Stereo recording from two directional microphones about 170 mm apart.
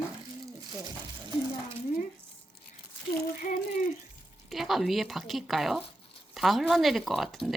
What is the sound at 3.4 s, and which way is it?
Speech, 55° left (ahead or behind).